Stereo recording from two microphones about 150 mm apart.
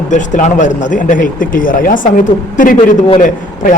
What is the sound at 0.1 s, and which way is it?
Speech, 55° left (ahead or behind).